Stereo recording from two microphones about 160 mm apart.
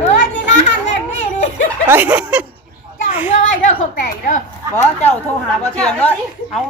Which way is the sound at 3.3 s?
50° left (ahead or behind).